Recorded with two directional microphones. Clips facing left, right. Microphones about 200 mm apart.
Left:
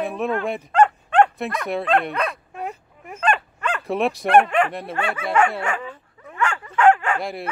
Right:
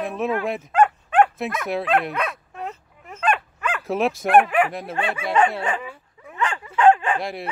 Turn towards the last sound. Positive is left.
turn(degrees=0)  # may be behind; listen again after turning